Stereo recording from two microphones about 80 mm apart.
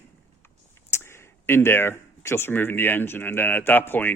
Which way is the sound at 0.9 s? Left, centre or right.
Left.